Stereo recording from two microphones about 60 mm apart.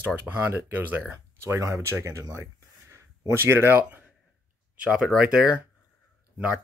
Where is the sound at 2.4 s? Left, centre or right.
Right.